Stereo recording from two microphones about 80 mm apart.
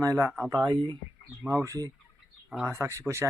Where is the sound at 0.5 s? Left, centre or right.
Right.